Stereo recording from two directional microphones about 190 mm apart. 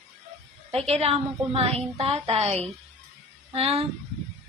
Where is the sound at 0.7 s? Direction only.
30° right (ahead or behind).